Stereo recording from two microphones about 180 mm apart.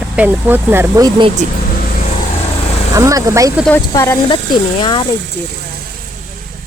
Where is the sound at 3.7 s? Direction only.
15° left (ahead or behind).